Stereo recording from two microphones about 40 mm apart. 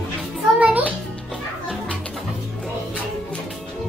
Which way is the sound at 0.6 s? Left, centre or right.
Right.